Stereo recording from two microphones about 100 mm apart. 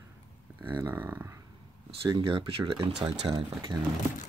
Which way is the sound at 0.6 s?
20° right (ahead or behind).